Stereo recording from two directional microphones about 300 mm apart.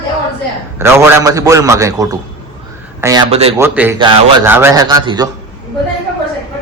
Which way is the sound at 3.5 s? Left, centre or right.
Centre.